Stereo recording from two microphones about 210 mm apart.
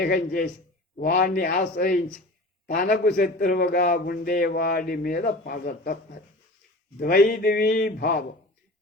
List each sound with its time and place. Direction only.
0.0 s a man's voice: 45° left (ahead or behind)
7.0 s a man's voice: 45° left (ahead or behind)